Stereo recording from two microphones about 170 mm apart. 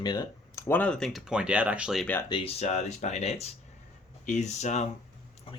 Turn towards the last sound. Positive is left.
turn(degrees=40)  # may be behind; listen again after turning